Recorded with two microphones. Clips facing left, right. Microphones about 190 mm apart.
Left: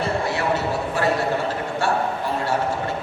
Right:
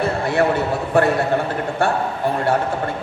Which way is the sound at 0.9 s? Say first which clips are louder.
Right 7 dB; 55° right (ahead or behind).